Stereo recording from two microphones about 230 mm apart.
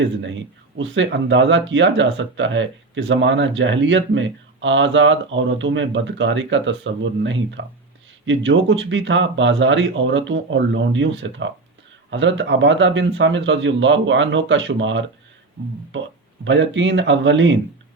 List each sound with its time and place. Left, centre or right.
0.0 s speech: right
16.4 s speech: right